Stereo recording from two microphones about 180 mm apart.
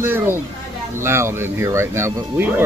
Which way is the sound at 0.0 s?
15° right (ahead or behind).